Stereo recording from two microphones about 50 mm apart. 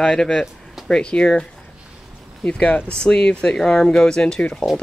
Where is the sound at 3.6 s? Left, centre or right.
Centre.